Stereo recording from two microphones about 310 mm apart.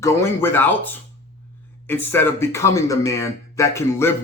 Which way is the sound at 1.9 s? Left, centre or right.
Centre.